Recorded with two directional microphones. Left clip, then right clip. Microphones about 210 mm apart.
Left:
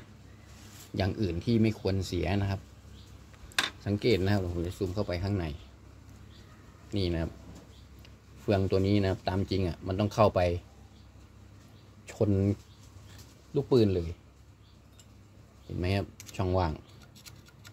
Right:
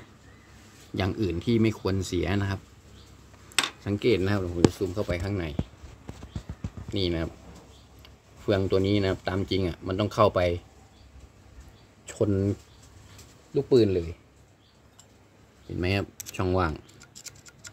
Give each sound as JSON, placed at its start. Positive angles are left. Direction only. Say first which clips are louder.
{"t": 0.9, "sound": "speech", "louder": "right 3 dB", "side_deg": -15}
{"t": 3.8, "sound": "speech", "louder": "right 3 dB", "side_deg": -5}
{"t": 6.9, "sound": "speech", "louder": "right 4 dB", "side_deg": 0}
{"t": 8.5, "sound": "speech", "louder": "right 3 dB", "side_deg": 0}
{"t": 12.1, "sound": "speech", "louder": "right 3 dB", "side_deg": -5}
{"t": 13.6, "sound": "speech", "louder": "right 4 dB", "side_deg": 0}
{"t": 15.8, "sound": "speech", "louder": "right 4 dB", "side_deg": -10}